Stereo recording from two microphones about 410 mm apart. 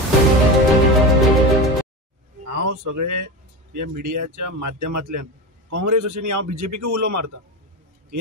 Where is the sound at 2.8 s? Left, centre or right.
Right.